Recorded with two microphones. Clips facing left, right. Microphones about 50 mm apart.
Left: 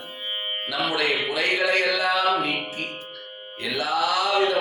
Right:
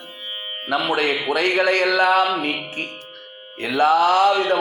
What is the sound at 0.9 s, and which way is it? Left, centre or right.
A man's voice, right.